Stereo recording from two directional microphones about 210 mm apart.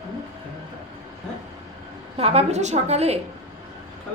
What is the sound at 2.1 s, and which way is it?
A woman's voice, 30° right (ahead or behind).